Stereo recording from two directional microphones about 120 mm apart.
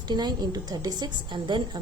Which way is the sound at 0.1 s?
35° right (ahead or behind).